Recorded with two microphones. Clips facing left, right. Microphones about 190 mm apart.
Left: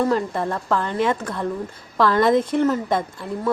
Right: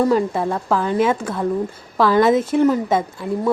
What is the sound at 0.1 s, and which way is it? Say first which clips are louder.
A woman's voice: right 4 dB; 10° right (ahead or behind).